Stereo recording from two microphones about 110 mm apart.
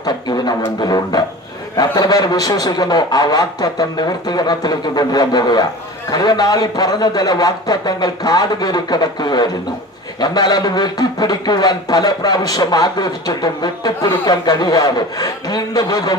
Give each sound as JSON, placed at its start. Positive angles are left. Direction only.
{"t": 0.0, "sound": "speech", "side_deg": 40}